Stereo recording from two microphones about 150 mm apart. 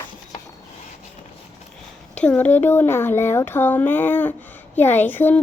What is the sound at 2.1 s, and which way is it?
Speech, 10° left (ahead or behind).